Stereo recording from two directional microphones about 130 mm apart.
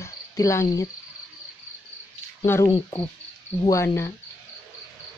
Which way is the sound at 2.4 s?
20° left (ahead or behind).